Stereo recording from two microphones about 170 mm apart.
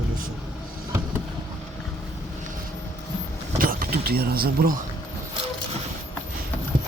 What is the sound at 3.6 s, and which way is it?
Speech, 55° right (ahead or behind).